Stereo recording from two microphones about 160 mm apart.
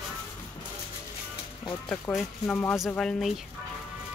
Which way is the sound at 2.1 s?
5° left (ahead or behind).